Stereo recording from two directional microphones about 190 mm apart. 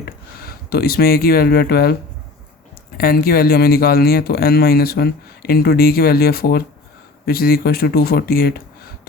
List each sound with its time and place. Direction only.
0.0 s speech: 55° left (ahead or behind)
3.0 s speech: 50° left (ahead or behind)